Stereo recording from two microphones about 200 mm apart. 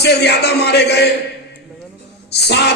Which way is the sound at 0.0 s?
55° left (ahead or behind).